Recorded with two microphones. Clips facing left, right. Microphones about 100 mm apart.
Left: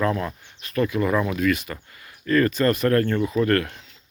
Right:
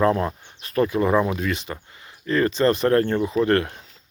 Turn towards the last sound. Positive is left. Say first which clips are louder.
# right 1 dB
turn(degrees=-25)  # may be behind; listen again after turning